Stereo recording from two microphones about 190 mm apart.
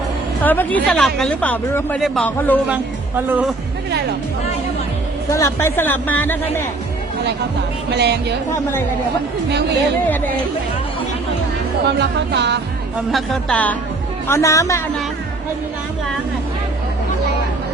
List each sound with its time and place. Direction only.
0.4 s speech: 10° left (ahead or behind)
3.2 s speech: 10° right (ahead or behind)
5.3 s speech: 15° left (ahead or behind)
7.9 s speech: 60° right (ahead or behind)
11.9 s speech: 65° right (ahead or behind)
13.1 s a woman's voice: centre (ahead or behind); by 14.8 s 15° left (ahead or behind)